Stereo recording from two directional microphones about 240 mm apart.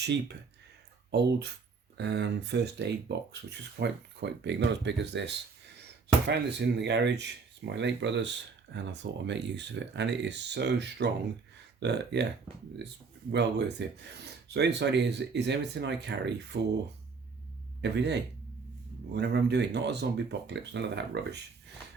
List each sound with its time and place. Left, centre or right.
0.0 s speech: right
2.0 s speech: right
13.3 s speech: right
17.7 s speech: right